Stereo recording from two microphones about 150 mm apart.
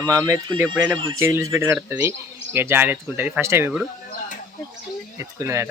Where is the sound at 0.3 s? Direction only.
20° right (ahead or behind).